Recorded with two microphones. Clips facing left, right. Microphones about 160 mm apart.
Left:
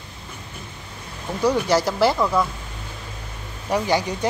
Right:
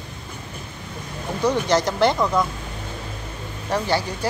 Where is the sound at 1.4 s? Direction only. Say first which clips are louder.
Left 1 dB; 5° left (ahead or behind).